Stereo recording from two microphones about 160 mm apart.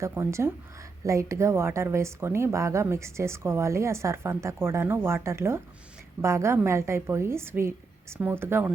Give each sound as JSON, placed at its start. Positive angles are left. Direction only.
{"t": 0.0, "sound": "a woman's voice", "side_deg": -15}